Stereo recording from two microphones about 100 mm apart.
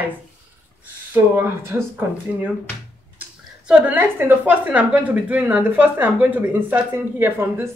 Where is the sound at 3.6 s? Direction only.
10° right (ahead or behind).